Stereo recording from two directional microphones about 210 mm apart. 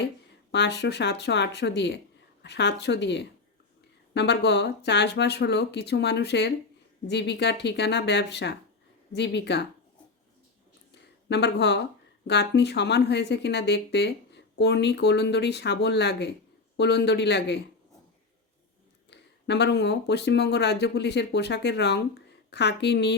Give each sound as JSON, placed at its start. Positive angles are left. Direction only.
{"t": 0.5, "sound": "speech", "side_deg": 55}
{"t": 10.9, "sound": "a sound", "side_deg": 55}
{"t": 12.3, "sound": "speech", "side_deg": 55}
{"t": 19.1, "sound": "speech", "side_deg": 55}